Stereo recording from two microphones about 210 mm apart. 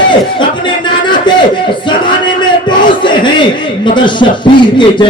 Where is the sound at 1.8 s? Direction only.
20° left (ahead or behind).